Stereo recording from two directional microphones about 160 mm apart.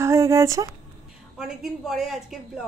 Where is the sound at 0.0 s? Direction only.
20° right (ahead or behind).